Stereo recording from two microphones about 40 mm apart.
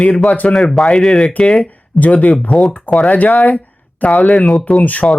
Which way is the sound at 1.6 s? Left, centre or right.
Left.